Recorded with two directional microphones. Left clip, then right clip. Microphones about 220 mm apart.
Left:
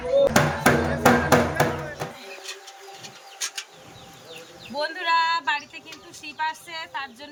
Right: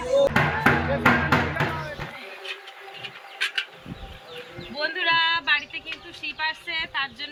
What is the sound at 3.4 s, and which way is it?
Bird, 10° left (ahead or behind).